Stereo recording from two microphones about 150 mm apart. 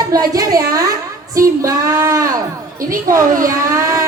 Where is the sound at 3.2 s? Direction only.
65° right (ahead or behind).